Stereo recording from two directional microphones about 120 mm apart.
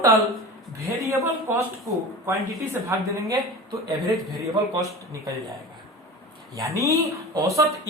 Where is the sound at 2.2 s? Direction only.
25° right (ahead or behind).